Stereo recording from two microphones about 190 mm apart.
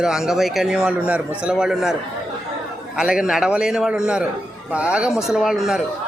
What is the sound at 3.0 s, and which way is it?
Speech, 5° right (ahead or behind).